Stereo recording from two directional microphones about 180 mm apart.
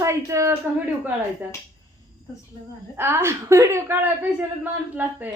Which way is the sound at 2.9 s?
15° right (ahead or behind).